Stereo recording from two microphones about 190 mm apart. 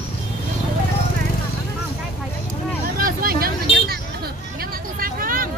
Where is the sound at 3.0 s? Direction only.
50° right (ahead or behind).